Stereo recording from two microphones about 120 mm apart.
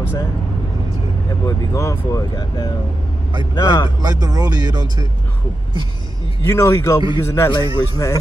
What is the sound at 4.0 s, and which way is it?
Speech, 35° right (ahead or behind).